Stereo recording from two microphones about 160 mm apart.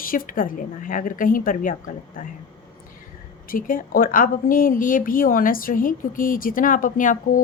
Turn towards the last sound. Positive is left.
turn(degrees=55)  # may be behind; listen again after turning